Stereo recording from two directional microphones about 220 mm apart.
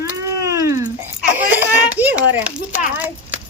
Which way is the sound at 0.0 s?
15° right (ahead or behind).